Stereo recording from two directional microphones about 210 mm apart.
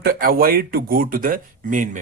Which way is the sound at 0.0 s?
45° right (ahead or behind).